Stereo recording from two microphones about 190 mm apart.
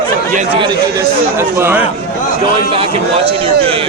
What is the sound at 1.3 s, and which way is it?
Speech, 10° right (ahead or behind).